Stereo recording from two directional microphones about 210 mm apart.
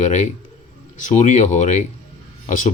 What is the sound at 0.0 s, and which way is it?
A man's voice, 35° left (ahead or behind).